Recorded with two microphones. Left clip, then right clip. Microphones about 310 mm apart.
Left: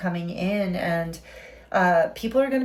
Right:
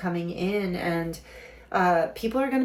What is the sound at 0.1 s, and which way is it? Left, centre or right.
Speech, centre.